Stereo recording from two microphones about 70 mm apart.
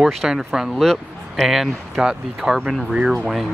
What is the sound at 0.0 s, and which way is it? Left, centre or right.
Speech, centre.